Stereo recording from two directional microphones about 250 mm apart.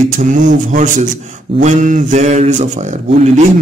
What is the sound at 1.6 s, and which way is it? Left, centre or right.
Speech, right.